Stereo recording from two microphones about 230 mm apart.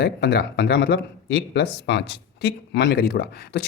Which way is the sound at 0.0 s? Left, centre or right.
Left.